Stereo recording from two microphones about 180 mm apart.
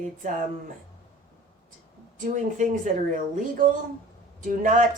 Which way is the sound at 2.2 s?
45° right (ahead or behind).